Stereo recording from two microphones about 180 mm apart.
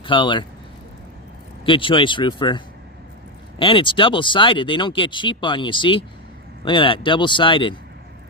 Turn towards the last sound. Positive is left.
turn(degrees=30)  # may be behind; listen again after turning